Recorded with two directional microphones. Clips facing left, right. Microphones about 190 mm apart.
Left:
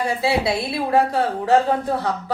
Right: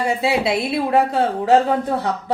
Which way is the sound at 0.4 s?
20° right (ahead or behind).